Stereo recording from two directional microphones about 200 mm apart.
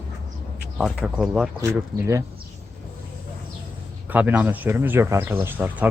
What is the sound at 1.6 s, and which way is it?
Speech, 15° right (ahead or behind).